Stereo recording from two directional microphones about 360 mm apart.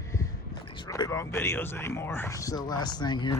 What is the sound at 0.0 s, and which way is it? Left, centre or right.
Speech, centre.